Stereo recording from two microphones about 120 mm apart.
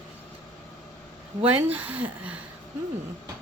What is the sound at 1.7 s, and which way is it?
Speech, 15° right (ahead or behind).